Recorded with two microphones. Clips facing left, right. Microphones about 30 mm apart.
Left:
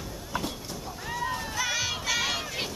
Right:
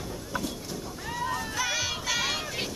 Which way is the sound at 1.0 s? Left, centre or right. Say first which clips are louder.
Even; centre.